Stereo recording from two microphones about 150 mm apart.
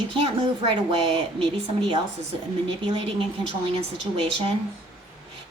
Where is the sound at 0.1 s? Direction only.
35° right (ahead or behind).